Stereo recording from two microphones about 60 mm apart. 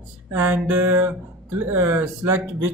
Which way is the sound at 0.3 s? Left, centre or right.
Right.